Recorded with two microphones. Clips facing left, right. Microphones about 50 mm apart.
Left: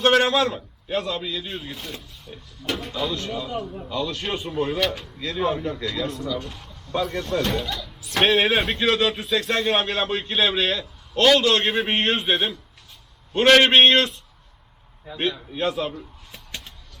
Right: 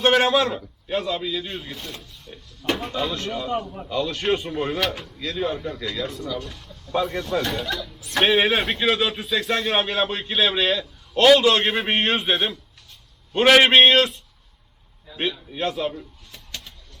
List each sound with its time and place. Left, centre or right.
0.1 s a man's voice: centre
5.0 s a man's voice: centre
6.9 s a man's voice: centre
15.1 s a man's voice: left
15.5 s a man's voice: centre